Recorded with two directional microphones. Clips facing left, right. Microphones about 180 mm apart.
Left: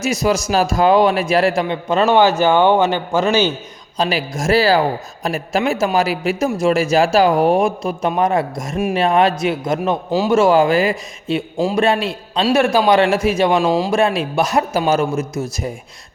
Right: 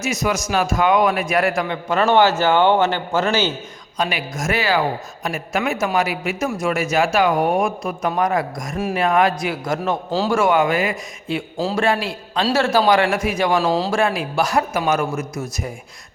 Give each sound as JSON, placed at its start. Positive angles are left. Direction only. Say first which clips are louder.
{"t": 0.0, "sound": "a man's voice", "louder": "left 4 dB", "side_deg": 30}
{"t": 3.9, "sound": "a man's voice", "louder": "left 4 dB", "side_deg": 30}
{"t": 10.3, "sound": "a man's voice", "louder": "left 5 dB", "side_deg": 30}